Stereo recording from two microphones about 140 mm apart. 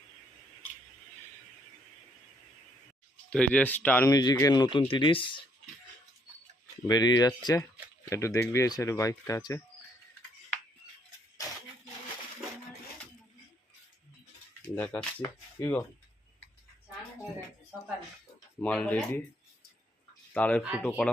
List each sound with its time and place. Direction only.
3.2 s speech: 10° left (ahead or behind); by 5.3 s 35° left (ahead or behind)
6.8 s speech: 30° left (ahead or behind)
14.8 s speech: 5° left (ahead or behind)
15.5 s speech: 20° left (ahead or behind)
18.6 s speech: 10° left (ahead or behind)
20.3 s speech: 10° left (ahead or behind)